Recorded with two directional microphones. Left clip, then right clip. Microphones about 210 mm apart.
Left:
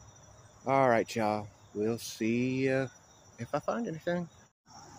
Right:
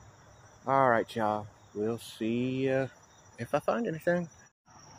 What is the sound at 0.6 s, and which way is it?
Speech, 25° left (ahead or behind).